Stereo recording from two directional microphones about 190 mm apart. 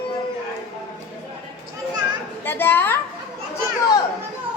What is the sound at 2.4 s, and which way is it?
Speech, 10° left (ahead or behind).